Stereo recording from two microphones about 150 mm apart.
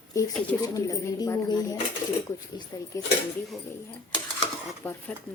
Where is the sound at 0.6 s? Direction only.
25° left (ahead or behind).